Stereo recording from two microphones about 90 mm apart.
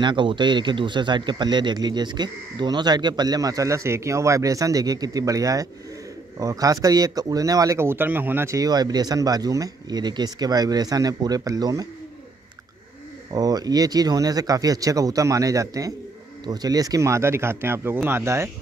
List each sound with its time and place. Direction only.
0.0 s a man's voice: 65° right (ahead or behind); by 7.8 s 40° right (ahead or behind)
7.8 s speech: 25° right (ahead or behind)
8.5 s a man's voice: 45° right (ahead or behind)
13.3 s a man's voice: 45° right (ahead or behind)